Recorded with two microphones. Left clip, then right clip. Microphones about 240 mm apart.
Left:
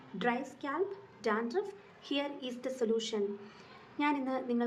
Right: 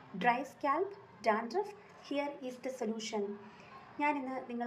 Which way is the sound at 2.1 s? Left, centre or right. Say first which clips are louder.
Left 1 dB; centre.